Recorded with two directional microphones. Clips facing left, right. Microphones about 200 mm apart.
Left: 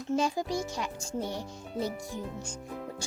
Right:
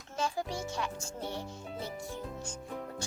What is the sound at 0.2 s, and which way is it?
A child's voice, 15° left (ahead or behind).